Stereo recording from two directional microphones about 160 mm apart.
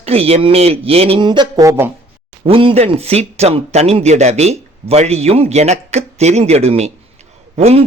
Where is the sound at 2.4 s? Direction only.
35° right (ahead or behind).